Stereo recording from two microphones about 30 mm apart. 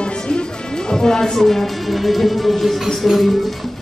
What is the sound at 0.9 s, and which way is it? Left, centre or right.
Speech, centre.